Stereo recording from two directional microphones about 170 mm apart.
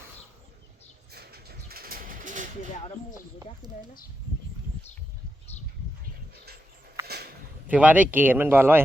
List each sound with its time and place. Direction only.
1.1 s pigeon: 65° right (ahead or behind); by 2.5 s 50° right (ahead or behind)
3.6 s speech: 25° right (ahead or behind)
7.0 s a sound: 70° right (ahead or behind)
7.7 s speech: 10° right (ahead or behind)